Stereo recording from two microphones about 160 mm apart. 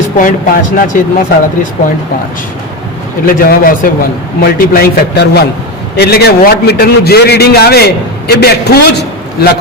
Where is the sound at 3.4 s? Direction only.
65° left (ahead or behind).